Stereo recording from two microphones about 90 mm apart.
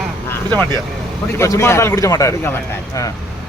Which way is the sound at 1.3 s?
35° left (ahead or behind).